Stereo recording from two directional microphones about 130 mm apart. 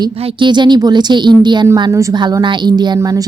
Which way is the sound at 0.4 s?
35° right (ahead or behind).